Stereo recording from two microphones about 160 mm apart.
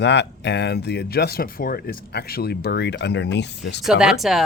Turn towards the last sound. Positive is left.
turn(degrees=0)  # may be behind; listen again after turning